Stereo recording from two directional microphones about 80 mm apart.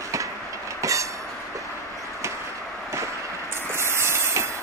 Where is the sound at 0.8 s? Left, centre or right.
Right.